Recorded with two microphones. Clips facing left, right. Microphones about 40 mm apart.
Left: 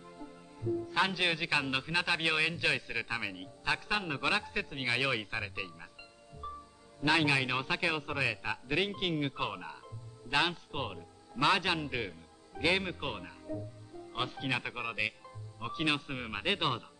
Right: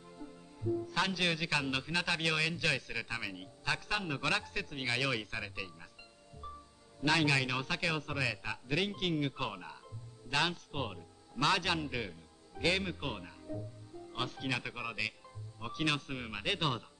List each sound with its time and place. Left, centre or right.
0.2 s a man's voice: centre
6.4 s music: centre
7.0 s a man's voice: centre